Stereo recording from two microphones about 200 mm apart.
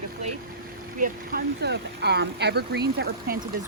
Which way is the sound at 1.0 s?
50° right (ahead or behind).